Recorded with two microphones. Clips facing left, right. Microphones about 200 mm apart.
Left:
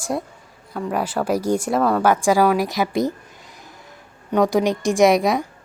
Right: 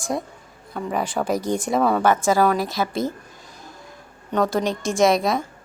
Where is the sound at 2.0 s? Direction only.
10° left (ahead or behind).